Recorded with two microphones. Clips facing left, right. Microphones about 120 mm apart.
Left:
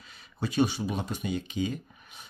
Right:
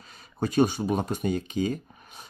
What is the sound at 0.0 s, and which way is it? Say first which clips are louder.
Speech: right 4 dB; 40° right (ahead or behind).